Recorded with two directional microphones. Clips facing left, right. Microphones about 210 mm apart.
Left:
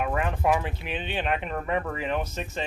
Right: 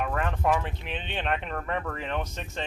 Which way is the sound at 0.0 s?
10° left (ahead or behind).